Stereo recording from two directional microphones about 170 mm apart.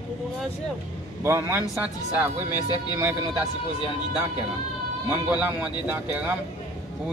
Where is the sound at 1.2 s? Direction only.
15° right (ahead or behind).